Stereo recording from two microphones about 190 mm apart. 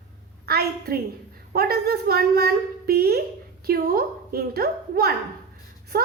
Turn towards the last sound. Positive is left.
turn(degrees=-50)  # may be behind; listen again after turning